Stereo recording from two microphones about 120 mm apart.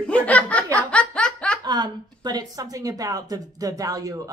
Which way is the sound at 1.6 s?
35° right (ahead or behind).